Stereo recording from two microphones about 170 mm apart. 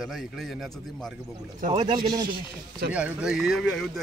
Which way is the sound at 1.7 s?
30° right (ahead or behind).